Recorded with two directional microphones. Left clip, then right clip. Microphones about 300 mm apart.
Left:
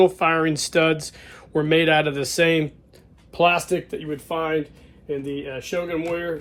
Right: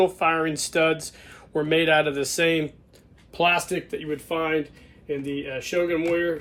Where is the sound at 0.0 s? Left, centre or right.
Left.